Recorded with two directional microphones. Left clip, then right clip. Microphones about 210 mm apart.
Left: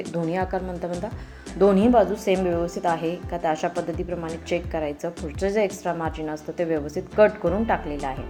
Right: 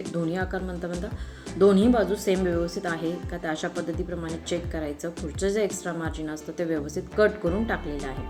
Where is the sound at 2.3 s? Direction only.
60° left (ahead or behind).